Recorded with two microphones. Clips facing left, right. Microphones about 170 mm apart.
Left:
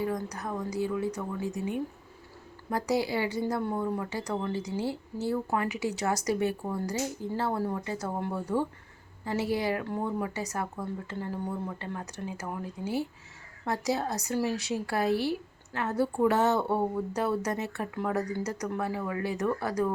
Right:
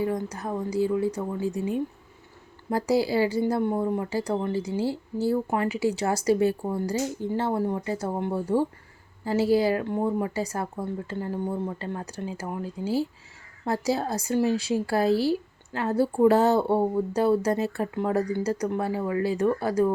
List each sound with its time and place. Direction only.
0.0 s speech: 25° right (ahead or behind)